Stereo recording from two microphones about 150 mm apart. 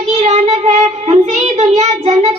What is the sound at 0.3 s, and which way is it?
Child singing, 50° right (ahead or behind).